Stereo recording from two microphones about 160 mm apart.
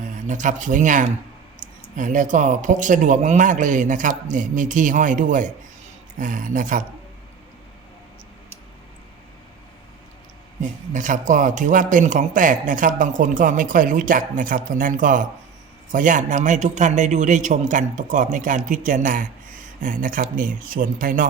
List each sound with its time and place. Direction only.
0.0 s a man's voice: 50° right (ahead or behind)
10.6 s a man's voice: 50° right (ahead or behind)